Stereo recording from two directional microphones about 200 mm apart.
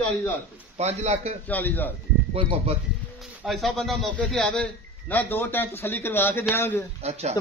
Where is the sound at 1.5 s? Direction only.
10° left (ahead or behind).